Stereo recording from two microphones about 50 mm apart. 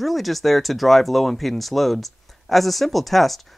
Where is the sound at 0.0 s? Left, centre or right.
Centre.